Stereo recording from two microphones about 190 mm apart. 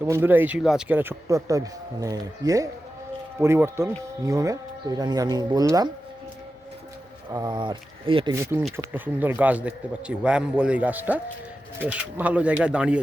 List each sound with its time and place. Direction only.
0.0 s a man's voice: 10° right (ahead or behind)
7.3 s speech: 25° right (ahead or behind)
8.4 s a man's voice: 10° right (ahead or behind)